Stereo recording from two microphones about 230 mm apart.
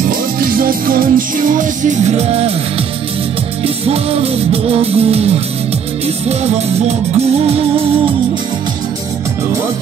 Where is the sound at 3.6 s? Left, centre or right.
Right.